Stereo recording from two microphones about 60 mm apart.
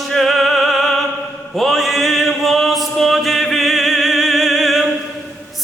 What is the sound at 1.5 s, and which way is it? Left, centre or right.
Chant, centre.